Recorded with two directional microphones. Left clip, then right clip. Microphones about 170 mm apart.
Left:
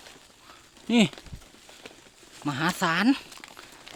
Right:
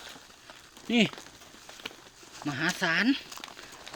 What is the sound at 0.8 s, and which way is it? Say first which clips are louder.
Speech: left 2 dB; 35° left (ahead or behind).